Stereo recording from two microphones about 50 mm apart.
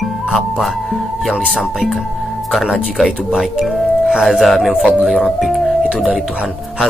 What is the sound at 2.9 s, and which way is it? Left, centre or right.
Speech, centre.